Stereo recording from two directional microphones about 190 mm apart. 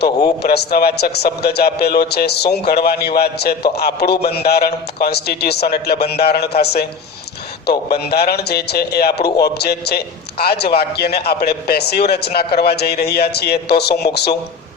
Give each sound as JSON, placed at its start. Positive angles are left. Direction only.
{"t": 0.4, "sound": "a man's voice", "side_deg": 55}